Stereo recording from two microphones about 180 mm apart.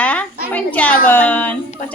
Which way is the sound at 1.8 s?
50° left (ahead or behind).